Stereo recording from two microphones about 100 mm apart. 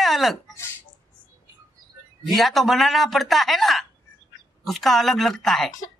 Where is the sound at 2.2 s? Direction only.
Centre (ahead or behind).